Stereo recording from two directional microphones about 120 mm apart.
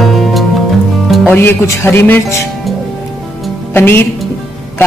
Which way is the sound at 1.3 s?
20° left (ahead or behind).